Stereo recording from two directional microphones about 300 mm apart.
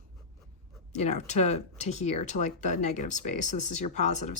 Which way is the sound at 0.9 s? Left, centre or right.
Left.